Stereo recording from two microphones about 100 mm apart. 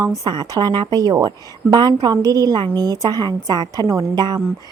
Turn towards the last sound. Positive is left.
turn(degrees=-45)  # may be behind; listen again after turning